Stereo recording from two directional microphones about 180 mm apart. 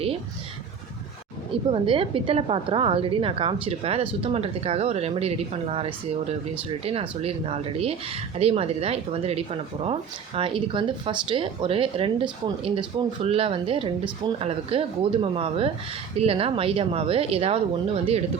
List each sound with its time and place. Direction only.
1.7 s speech: 30° right (ahead or behind)